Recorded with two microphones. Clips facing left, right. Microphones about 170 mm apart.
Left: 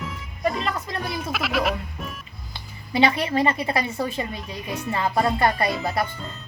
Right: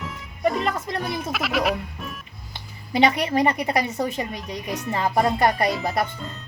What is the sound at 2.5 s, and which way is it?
A woman's voice, 20° right (ahead or behind).